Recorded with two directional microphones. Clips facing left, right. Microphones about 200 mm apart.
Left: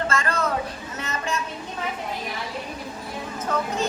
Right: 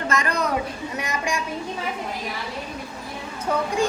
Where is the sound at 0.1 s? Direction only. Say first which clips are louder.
Right 1 dB; 15° right (ahead or behind).